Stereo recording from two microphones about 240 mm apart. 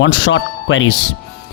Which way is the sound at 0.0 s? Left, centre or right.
Left.